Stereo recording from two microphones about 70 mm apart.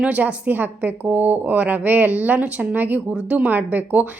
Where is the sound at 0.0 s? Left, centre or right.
Centre.